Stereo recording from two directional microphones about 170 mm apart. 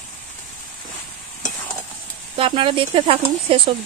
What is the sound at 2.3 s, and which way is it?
Speech, 30° right (ahead or behind).